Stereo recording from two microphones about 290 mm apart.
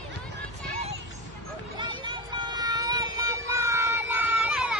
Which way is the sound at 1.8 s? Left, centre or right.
Centre.